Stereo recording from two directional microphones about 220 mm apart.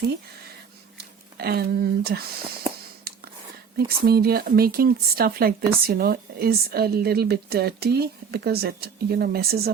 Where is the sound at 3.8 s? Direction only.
45° right (ahead or behind).